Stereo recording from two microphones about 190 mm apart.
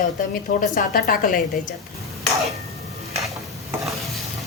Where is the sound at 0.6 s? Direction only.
45° left (ahead or behind).